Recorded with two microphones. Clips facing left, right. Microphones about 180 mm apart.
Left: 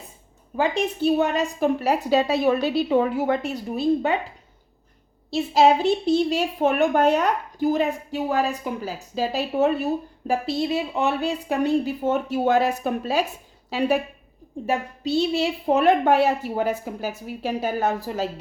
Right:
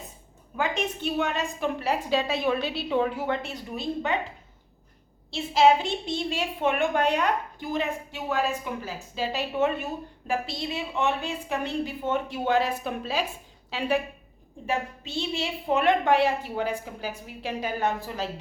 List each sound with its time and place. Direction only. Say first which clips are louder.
0.5 s a woman's voice: left 5 dB; 35° left (ahead or behind)
5.3 s a woman's voice: left 3 dB; 40° left (ahead or behind)